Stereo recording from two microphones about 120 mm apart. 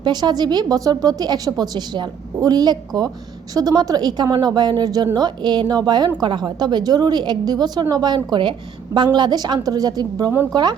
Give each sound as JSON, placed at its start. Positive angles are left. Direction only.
{"t": 0.0, "sound": "a woman's voice", "side_deg": -35}